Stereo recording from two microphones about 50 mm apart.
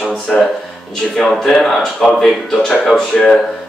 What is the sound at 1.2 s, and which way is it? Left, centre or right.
Speech, centre.